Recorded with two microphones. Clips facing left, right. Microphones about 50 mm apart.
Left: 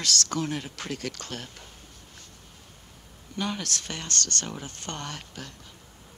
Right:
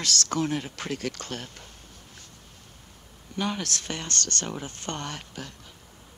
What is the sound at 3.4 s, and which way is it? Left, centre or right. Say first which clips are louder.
Speech: right 2 dB; centre.